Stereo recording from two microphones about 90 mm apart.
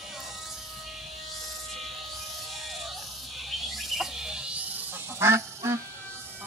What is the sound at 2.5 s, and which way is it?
Music, centre (ahead or behind).